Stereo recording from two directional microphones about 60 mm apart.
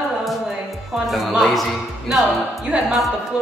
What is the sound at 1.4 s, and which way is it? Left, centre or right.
A woman's voice, centre.